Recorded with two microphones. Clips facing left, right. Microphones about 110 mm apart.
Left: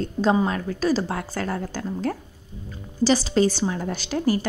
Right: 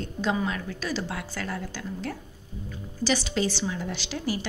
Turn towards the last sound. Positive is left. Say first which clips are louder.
# left 8 dB
turn(degrees=45)  # may be behind; listen again after turning